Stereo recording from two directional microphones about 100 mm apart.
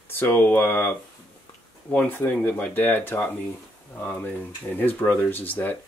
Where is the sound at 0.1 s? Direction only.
20° left (ahead or behind).